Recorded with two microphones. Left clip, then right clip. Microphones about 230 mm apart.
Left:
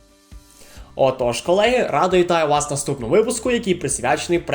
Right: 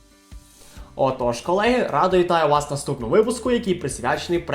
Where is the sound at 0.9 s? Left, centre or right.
Left.